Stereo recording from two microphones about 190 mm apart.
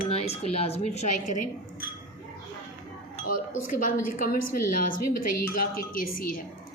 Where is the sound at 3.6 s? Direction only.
45° left (ahead or behind).